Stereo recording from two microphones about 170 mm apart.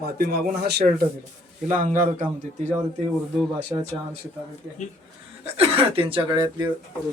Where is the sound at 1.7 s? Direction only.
45° right (ahead or behind).